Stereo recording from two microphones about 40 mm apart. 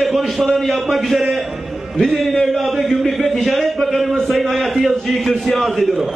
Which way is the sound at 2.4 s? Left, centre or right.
Centre.